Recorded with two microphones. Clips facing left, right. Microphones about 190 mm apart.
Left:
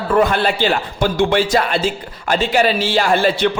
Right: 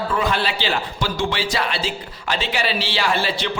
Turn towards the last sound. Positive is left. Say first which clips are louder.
# left 7 dB
turn(degrees=50)  # may be behind; listen again after turning